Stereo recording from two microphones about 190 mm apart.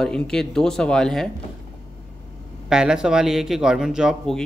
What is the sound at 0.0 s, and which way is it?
Speech, 5° left (ahead or behind).